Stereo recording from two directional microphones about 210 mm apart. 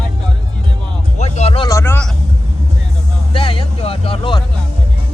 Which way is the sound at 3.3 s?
25° left (ahead or behind).